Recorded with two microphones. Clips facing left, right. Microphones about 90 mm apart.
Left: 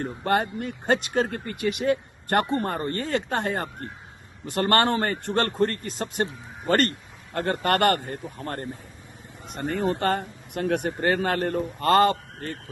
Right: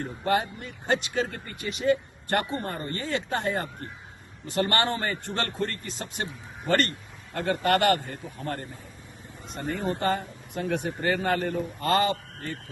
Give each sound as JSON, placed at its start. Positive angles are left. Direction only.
{"t": 0.0, "sound": "speech", "side_deg": 50}
{"t": 9.5, "sound": "speech", "side_deg": 60}